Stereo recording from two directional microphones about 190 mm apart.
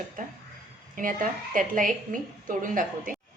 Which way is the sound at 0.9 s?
45° right (ahead or behind).